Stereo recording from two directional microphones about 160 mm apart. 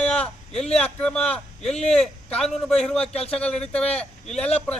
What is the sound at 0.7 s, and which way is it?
A man's voice, 5° left (ahead or behind).